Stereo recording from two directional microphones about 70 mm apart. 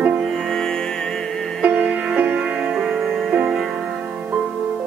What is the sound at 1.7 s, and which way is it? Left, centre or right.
Music, centre.